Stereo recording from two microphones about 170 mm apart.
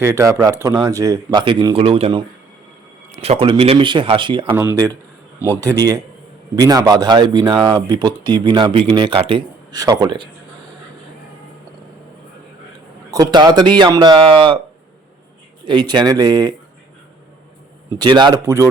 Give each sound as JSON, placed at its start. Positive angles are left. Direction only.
{"t": 0.0, "sound": "speech", "side_deg": -15}
{"t": 4.5, "sound": "speech", "side_deg": -15}
{"t": 13.1, "sound": "speech", "side_deg": -25}
{"t": 15.6, "sound": "speech", "side_deg": -25}
{"t": 17.9, "sound": "speech", "side_deg": -25}